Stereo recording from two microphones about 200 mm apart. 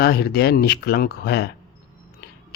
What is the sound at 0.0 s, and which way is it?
A man's voice, 50° left (ahead or behind).